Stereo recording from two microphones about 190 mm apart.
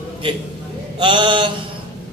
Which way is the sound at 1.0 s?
25° right (ahead or behind).